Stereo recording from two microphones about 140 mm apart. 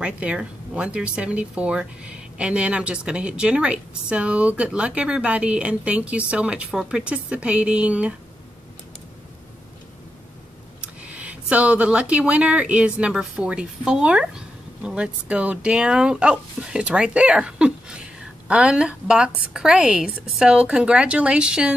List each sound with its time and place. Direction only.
0.0 s speech: 10° right (ahead or behind)
10.8 s speech: 10° right (ahead or behind)